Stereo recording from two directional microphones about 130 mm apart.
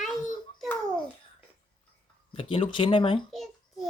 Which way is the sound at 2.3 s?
45° left (ahead or behind).